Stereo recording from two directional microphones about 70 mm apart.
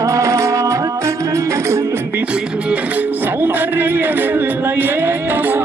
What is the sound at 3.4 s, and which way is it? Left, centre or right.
Music, right.